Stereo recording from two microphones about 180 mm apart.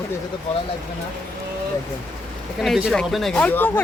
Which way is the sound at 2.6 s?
Centre (ahead or behind).